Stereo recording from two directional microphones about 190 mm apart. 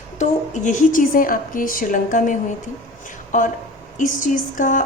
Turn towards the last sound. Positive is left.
turn(degrees=45)  # may be behind; listen again after turning